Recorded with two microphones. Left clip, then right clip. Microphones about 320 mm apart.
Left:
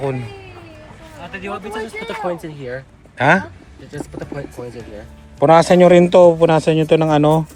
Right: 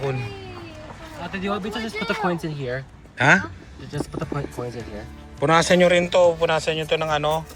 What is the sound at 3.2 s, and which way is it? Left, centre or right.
Speech, centre.